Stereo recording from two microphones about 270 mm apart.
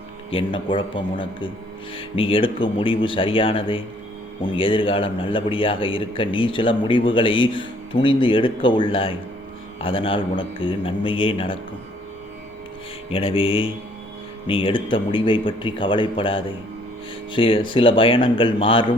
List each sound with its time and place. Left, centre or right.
0.3 s a man's voice: centre
13.1 s a man's voice: centre